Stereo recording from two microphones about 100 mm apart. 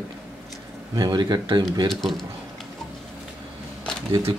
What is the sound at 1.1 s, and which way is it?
Speech, 45° right (ahead or behind).